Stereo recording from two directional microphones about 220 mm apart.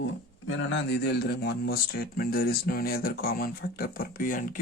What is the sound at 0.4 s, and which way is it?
Speech, 60° left (ahead or behind).